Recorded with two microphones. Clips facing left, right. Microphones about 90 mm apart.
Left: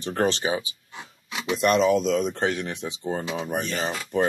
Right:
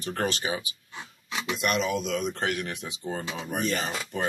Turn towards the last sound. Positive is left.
turn(degrees=30)  # may be behind; listen again after turning